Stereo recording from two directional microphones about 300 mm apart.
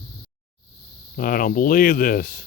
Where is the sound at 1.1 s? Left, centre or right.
Left.